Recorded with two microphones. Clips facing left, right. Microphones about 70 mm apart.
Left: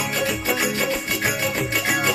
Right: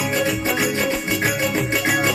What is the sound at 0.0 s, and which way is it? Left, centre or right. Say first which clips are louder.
Music: right 3 dB; centre.